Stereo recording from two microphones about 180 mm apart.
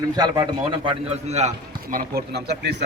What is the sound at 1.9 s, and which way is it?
Speech, 60° right (ahead or behind).